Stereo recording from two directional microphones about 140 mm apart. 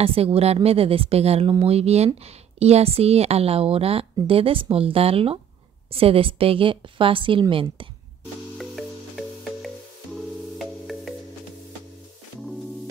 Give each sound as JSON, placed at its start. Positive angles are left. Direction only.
{"t": 0.0, "sound": "a woman's voice", "side_deg": -45}
{"t": 8.5, "sound": "music", "side_deg": 0}